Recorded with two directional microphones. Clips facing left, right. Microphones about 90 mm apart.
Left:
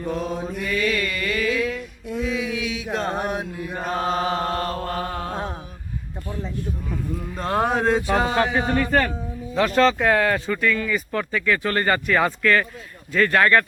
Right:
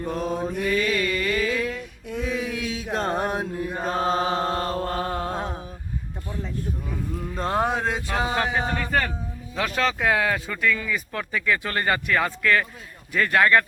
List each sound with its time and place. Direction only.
0.3 s speech: centre (ahead or behind)
0.5 s mantra: 35° right (ahead or behind)
1.1 s music: 30° right (ahead or behind)
1.6 s a sound: centre (ahead or behind)
2.2 s mantra: 45° right (ahead or behind)
3.8 s chant: 30° right (ahead or behind)
5.3 s mantra: centre (ahead or behind)
7.3 s a sound: 20° right (ahead or behind)
7.7 s speech: centre (ahead or behind)